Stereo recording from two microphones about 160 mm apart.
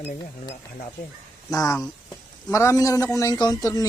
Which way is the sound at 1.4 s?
20° left (ahead or behind).